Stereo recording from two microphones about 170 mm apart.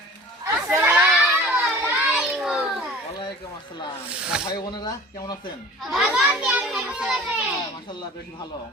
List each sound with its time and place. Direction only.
0.4 s crowd: 15° right (ahead or behind)
4.4 s speech: 25° left (ahead or behind)
5.8 s a child's voice: centre (ahead or behind)